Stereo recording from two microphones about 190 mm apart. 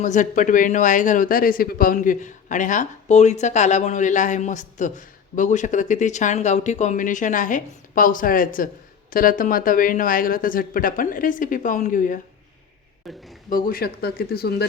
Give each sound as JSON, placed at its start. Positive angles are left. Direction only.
{"t": 0.0, "sound": "speech", "side_deg": 40}
{"t": 13.0, "sound": "speech", "side_deg": 0}
{"t": 13.5, "sound": "speech", "side_deg": 50}